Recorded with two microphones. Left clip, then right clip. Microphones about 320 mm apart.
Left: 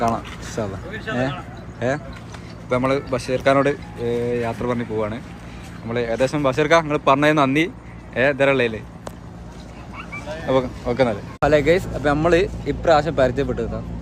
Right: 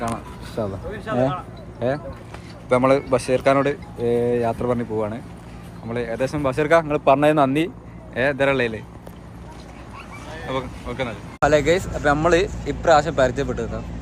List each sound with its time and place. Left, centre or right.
0.0 s a sound: centre
1.8 s speech: centre
10.4 s speech: centre
11.3 s speech: centre